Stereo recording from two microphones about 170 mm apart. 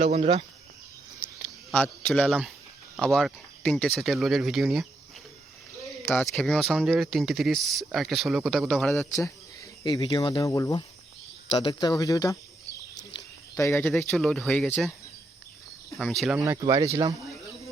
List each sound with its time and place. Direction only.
0.0 s speech: 40° right (ahead or behind)
1.7 s speech: 10° left (ahead or behind)
6.1 s speech: centre (ahead or behind)
9.8 s speech: 25° left (ahead or behind); by 14.9 s centre (ahead or behind)
16.0 s speech: centre (ahead or behind)
16.4 s speech: 20° right (ahead or behind)